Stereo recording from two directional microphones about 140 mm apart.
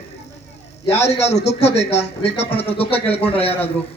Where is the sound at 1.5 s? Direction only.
50° left (ahead or behind).